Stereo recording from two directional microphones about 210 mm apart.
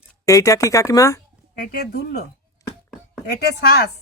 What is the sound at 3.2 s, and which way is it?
Speech, 55° left (ahead or behind).